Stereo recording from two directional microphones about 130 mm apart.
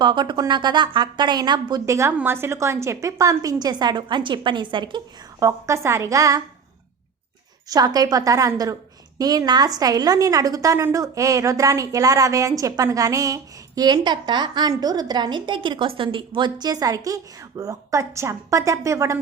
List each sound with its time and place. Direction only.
0.0 s a woman's voice: 35° right (ahead or behind)
1.9 s a woman's voice: 20° right (ahead or behind)
5.4 s a woman's voice: 25° right (ahead or behind)
7.7 s a woman's voice: 30° right (ahead or behind)